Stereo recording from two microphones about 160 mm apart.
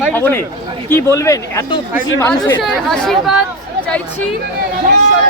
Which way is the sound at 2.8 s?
Centre (ahead or behind).